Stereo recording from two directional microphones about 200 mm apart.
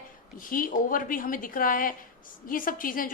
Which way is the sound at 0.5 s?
45° left (ahead or behind).